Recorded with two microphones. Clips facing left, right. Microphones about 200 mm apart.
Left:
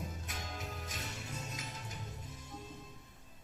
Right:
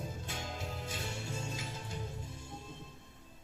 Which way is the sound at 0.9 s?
30° right (ahead or behind).